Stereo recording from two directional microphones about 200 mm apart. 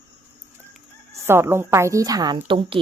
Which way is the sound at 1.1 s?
10° right (ahead or behind).